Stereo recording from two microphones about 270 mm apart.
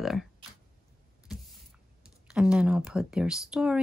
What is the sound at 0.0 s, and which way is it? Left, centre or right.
Speech, centre.